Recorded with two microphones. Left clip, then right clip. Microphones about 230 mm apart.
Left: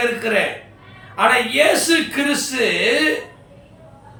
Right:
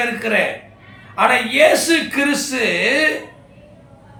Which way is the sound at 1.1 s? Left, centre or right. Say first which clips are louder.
Even; centre.